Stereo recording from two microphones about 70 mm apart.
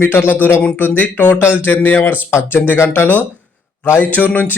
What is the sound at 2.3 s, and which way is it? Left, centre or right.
Speech, left.